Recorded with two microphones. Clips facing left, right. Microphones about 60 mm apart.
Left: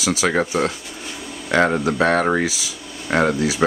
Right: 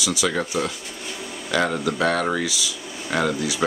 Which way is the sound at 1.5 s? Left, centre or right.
Left.